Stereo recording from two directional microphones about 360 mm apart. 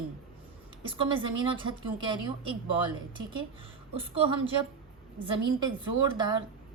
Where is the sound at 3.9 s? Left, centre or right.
Centre.